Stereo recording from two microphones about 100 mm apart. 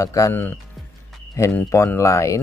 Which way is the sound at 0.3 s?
20° left (ahead or behind).